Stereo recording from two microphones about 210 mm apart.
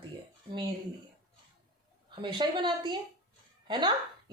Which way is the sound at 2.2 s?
20° right (ahead or behind).